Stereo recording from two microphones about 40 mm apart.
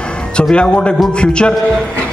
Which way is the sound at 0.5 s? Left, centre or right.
Left.